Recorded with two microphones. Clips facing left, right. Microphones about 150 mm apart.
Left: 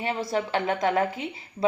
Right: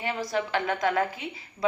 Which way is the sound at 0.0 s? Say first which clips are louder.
Left 2 dB; 25° left (ahead or behind).